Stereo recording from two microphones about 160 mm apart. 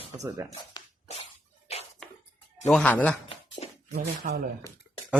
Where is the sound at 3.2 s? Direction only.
35° left (ahead or behind).